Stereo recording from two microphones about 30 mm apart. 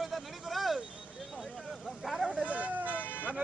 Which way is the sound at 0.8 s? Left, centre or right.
Right.